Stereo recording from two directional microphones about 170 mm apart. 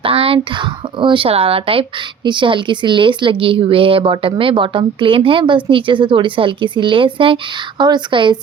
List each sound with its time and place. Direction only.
0.0 s speech: 35° right (ahead or behind)